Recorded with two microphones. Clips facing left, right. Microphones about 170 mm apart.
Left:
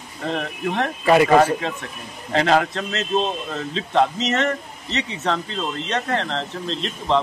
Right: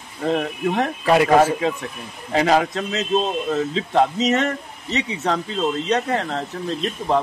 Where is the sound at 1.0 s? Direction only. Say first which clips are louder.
Left 1 dB; centre (ahead or behind); by 4.4 s 15° right (ahead or behind).